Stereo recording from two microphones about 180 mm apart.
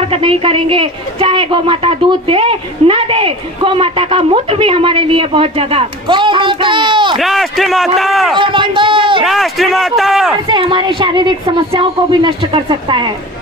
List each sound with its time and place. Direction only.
0.1 s a woman's voice: 30° right (ahead or behind)
7.2 s a man's voice: centre (ahead or behind)
8.4 s a woman's voice: 25° right (ahead or behind)
9.2 s a man's voice: centre (ahead or behind)
10.5 s a woman's voice: 25° right (ahead or behind)